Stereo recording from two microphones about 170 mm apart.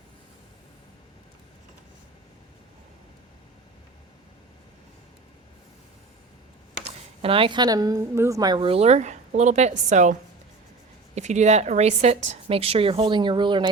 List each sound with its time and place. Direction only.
7.2 s a woman's voice: 35° right (ahead or behind)